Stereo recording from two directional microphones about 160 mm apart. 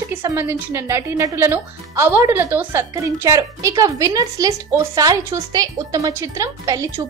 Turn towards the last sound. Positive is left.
turn(degrees=-20)  # may be behind; listen again after turning